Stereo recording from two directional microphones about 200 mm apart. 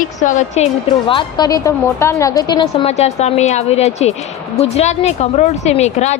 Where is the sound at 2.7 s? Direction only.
30° left (ahead or behind).